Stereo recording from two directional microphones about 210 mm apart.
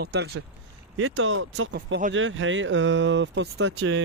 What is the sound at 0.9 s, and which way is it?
Speech, 70° right (ahead or behind).